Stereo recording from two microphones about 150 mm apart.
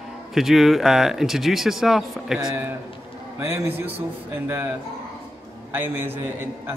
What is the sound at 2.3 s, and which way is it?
A man's voice, 15° right (ahead or behind).